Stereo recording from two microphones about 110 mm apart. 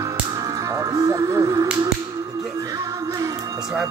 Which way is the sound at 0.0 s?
30° right (ahead or behind).